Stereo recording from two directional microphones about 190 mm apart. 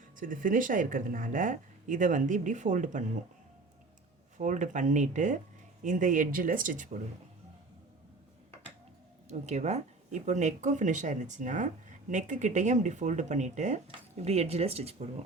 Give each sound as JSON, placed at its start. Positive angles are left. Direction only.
{"t": 0.2, "sound": "speech", "side_deg": -45}
{"t": 4.4, "sound": "speech", "side_deg": -40}
{"t": 9.3, "sound": "speech", "side_deg": -35}